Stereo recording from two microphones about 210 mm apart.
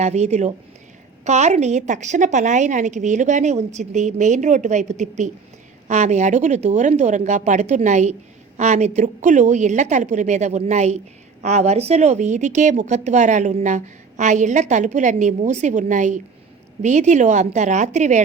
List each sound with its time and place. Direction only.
0.0 s speech: 30° right (ahead or behind)